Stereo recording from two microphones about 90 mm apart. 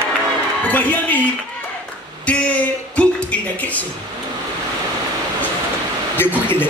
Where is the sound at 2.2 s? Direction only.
15° left (ahead or behind).